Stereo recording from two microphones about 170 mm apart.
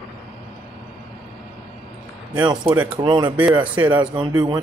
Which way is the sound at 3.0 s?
25° right (ahead or behind).